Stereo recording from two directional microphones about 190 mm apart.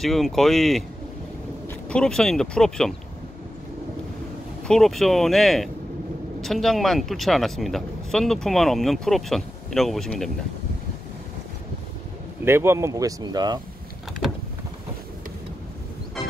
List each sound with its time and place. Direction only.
0.0 s speech: centre (ahead or behind)
4.6 s speech: centre (ahead or behind)
12.4 s speech: 15° right (ahead or behind)